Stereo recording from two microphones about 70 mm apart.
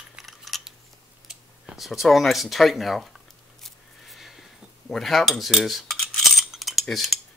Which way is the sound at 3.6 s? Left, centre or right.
Centre.